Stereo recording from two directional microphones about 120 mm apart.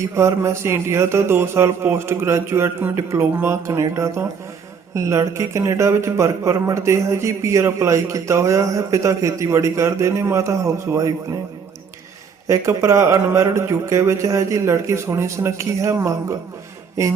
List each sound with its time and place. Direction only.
0.2 s speech: 25° right (ahead or behind)
12.5 s speech: 25° right (ahead or behind)